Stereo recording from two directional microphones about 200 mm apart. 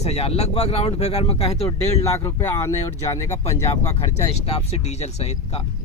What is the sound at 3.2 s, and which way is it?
Speech, 35° left (ahead or behind).